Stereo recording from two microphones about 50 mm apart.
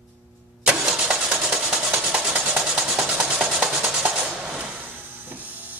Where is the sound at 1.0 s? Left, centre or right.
Right.